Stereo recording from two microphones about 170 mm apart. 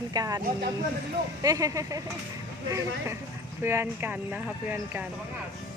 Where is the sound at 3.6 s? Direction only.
15° right (ahead or behind).